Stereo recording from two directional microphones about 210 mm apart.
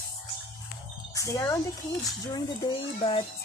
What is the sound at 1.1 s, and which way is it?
A child's voice, 15° left (ahead or behind).